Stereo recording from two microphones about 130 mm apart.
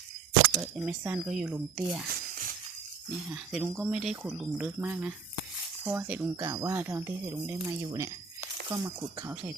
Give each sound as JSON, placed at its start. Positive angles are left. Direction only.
{"t": 0.6, "sound": "speech", "side_deg": -10}
{"t": 3.2, "sound": "speech", "side_deg": -10}